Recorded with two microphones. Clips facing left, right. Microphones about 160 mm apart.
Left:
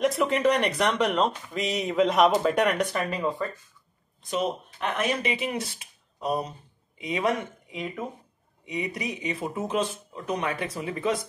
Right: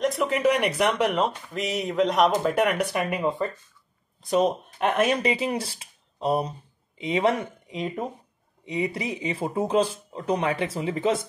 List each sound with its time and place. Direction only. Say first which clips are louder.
0.0 s speech: even; centre (ahead or behind); by 3.4 s 20° right (ahead or behind)
4.2 s speech: right 6 dB; 40° right (ahead or behind)